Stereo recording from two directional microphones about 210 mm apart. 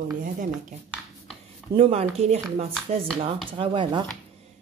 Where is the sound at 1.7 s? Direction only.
30° right (ahead or behind).